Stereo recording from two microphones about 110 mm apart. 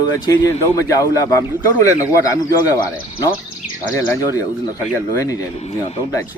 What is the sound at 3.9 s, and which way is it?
Speech, 30° left (ahead or behind).